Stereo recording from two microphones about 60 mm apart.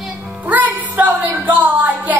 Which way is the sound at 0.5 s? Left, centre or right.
Right.